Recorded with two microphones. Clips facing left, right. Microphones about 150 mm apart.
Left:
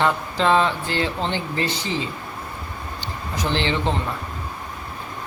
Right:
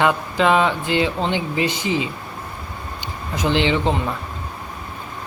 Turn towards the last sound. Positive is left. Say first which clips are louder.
# right 4 dB
turn(degrees=-15)  # may be behind; listen again after turning